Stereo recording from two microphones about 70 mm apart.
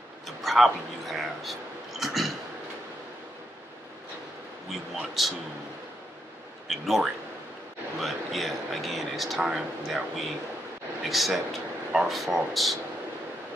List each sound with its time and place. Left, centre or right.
0.4 s speech: centre
4.9 s speech: centre
6.7 s speech: centre